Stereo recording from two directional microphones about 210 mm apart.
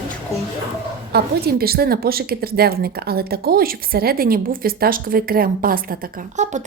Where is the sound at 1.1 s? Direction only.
45° right (ahead or behind).